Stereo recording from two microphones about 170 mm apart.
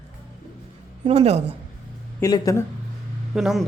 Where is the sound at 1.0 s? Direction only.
35° right (ahead or behind).